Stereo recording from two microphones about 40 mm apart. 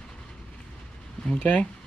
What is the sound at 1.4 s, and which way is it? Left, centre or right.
Speech, left.